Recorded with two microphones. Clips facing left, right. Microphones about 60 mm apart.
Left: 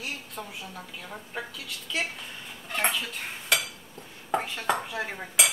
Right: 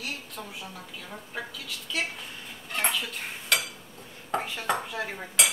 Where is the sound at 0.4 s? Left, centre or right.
Centre.